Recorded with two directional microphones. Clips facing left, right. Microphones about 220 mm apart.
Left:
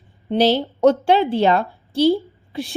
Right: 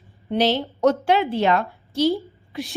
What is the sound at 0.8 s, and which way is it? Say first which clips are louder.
A woman's voice: left 3 dB; 30° left (ahead or behind).